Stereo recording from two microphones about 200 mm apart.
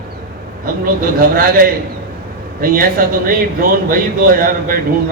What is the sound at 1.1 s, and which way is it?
Speech, 45° right (ahead or behind).